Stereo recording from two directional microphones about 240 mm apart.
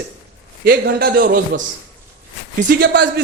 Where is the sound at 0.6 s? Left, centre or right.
Right.